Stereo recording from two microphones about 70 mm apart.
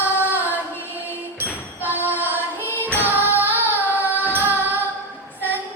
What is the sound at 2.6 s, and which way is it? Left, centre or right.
Music, left.